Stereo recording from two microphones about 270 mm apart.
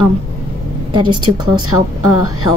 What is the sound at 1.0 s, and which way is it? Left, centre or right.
Speech, right.